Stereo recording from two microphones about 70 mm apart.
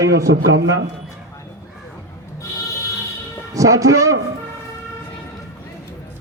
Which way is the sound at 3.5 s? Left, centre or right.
Right.